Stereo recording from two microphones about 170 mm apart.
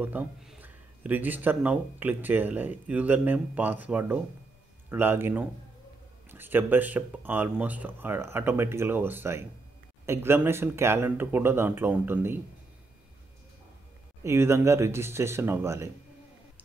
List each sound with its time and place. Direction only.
0.0 s speech: 10° right (ahead or behind)
14.2 s speech: 15° right (ahead or behind)